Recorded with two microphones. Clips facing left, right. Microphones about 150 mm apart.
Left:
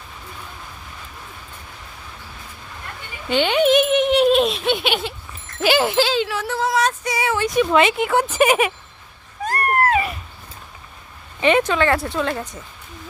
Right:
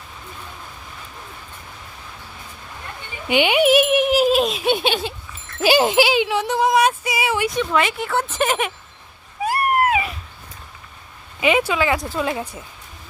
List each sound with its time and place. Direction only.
3.2 s a sound: 10° right (ahead or behind)
5.6 s speech: 15° right (ahead or behind)
7.0 s a sound: 5° right (ahead or behind)
7.7 s speech: 20° left (ahead or behind)
9.4 s cat: 10° right (ahead or behind)
11.3 s speech: 5° right (ahead or behind)